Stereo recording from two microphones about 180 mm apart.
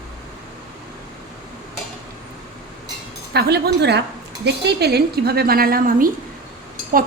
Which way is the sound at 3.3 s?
65° right (ahead or behind).